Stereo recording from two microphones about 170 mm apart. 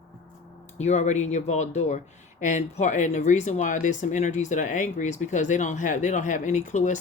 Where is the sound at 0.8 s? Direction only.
40° left (ahead or behind).